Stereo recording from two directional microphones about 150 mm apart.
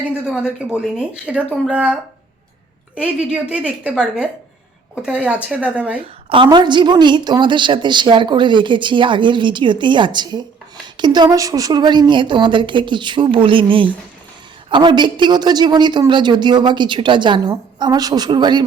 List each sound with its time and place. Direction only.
0.0 s speech: 5° right (ahead or behind)
3.5 s speech: 5° right (ahead or behind)
6.3 s a woman's voice: 30° right (ahead or behind)